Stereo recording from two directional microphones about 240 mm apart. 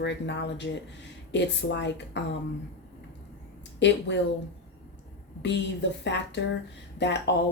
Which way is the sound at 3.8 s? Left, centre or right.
Left.